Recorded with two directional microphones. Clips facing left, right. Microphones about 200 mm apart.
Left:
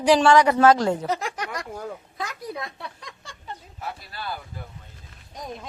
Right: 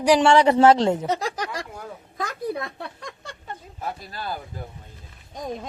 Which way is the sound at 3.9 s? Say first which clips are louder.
Right 2 dB; 45° right (ahead or behind).